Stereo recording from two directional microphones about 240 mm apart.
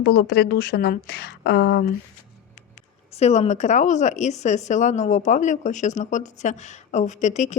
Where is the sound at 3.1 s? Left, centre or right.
Left.